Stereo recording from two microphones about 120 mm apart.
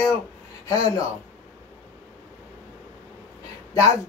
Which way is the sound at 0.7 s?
30° left (ahead or behind).